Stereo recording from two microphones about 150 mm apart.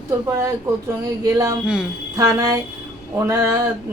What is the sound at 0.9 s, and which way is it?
A woman's voice, 20° right (ahead or behind).